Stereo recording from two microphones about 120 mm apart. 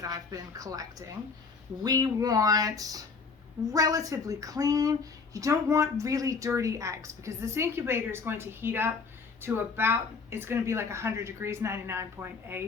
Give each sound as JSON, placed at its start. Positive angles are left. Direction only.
{"t": 0.0, "sound": "speech", "side_deg": -30}
{"t": 1.8, "sound": "a sound", "side_deg": -30}
{"t": 3.7, "sound": "speech", "side_deg": -30}